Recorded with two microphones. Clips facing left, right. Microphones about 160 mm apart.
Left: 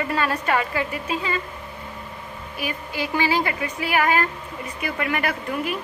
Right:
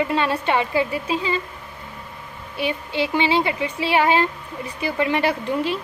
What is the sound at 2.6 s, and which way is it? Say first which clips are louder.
A woman's voice: right 5 dB; 25° right (ahead or behind).